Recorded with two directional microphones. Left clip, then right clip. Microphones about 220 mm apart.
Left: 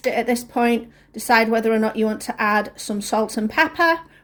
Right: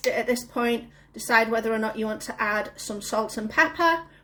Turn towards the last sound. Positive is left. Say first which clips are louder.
# left 4 dB
turn(degrees=35)  # may be behind; listen again after turning